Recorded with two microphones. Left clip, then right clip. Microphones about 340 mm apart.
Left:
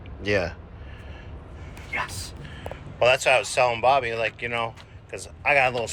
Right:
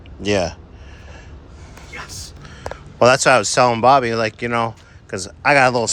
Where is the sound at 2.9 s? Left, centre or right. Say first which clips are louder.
Right 7 dB; right.